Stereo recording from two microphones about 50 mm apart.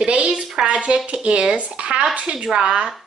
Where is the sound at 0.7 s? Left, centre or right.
Right.